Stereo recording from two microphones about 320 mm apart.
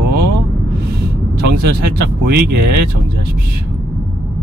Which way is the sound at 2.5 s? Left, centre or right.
Right.